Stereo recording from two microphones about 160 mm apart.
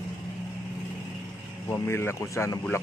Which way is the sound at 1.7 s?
15° left (ahead or behind).